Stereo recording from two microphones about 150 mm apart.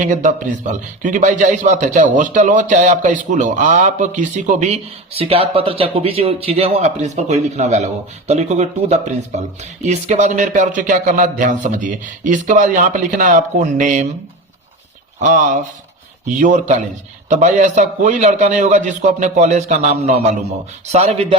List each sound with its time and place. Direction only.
0.0 s speech: 60° right (ahead or behind)
15.2 s speech: 55° right (ahead or behind)
20.9 s music: 40° right (ahead or behind)